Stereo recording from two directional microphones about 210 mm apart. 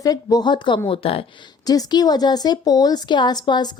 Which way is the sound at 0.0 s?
15° left (ahead or behind).